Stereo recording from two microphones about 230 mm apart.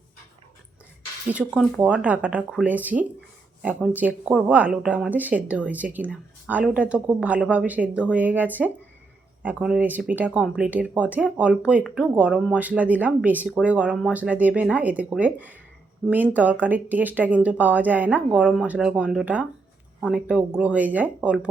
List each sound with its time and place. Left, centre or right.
1.3 s speech: centre